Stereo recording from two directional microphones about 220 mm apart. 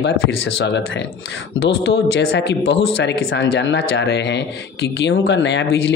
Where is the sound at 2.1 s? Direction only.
55° left (ahead or behind).